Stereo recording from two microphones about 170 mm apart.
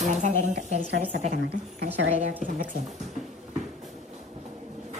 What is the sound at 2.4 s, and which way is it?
Speech, 50° right (ahead or behind).